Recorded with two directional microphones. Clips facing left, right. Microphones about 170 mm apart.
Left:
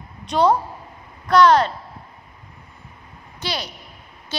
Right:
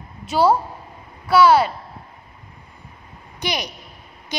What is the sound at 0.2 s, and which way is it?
A woman's voice, 5° right (ahead or behind).